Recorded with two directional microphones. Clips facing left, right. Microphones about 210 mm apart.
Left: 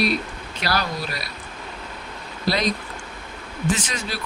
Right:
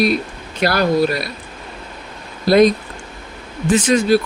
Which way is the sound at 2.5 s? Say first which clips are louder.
Right 12 dB; 50° right (ahead or behind).